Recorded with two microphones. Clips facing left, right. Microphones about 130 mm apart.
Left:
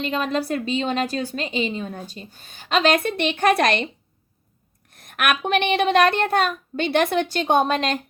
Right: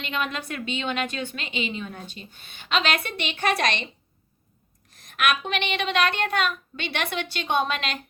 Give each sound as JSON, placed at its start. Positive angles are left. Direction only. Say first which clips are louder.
{"t": 0.0, "sound": "a woman's voice", "louder": "left 6 dB", "side_deg": 35}
{"t": 4.9, "sound": "speech", "louder": "left 2 dB", "side_deg": 55}